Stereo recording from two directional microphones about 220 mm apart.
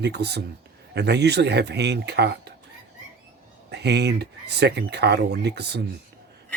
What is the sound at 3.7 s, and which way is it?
Speech, 50° right (ahead or behind).